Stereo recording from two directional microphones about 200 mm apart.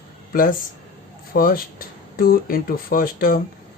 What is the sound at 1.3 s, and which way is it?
Speech, 45° left (ahead or behind).